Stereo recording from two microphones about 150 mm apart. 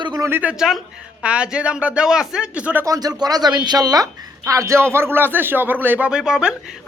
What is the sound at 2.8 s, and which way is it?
Speech, 25° right (ahead or behind).